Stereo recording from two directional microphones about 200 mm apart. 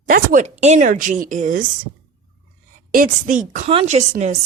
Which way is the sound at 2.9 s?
45° right (ahead or behind).